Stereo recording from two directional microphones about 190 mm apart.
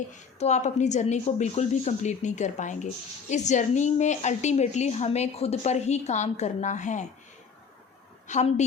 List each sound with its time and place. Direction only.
0.1 s a woman's voice: 35° left (ahead or behind)
8.3 s a woman's voice: 35° left (ahead or behind)